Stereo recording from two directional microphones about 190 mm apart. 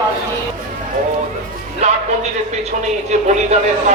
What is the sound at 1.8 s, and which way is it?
Music, 35° right (ahead or behind).